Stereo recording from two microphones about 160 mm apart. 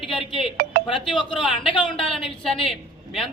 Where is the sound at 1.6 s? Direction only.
35° left (ahead or behind).